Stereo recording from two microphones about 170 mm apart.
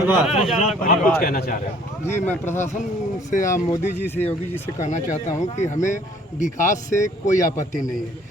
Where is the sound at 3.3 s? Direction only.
50° left (ahead or behind).